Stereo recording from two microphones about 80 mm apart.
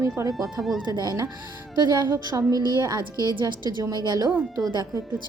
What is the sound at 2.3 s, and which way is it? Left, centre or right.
Speech, right.